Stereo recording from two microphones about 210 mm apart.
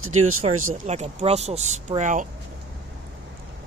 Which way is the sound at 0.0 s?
85° right.